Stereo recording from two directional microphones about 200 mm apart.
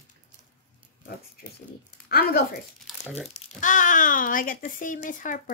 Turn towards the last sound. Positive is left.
turn(degrees=40)  # may be behind; listen again after turning